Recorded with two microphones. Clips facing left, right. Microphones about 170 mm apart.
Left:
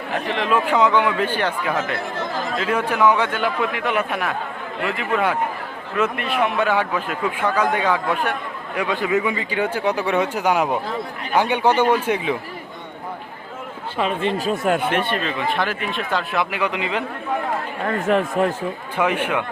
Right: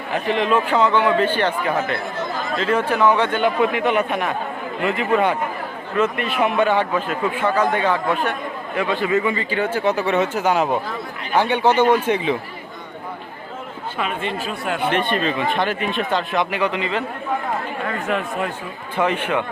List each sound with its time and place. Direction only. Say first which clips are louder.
0.3 s a man's voice: right 2 dB; centre (ahead or behind)
0.6 s a man's voice: even; 10° left (ahead or behind)
14.0 s speech: left 4 dB; 35° left (ahead or behind)
14.8 s a man's voice: right 2 dB; 5° left (ahead or behind)
17.8 s speech: left 6 dB; 40° left (ahead or behind)
18.9 s a man's voice: right 1 dB; 10° left (ahead or behind)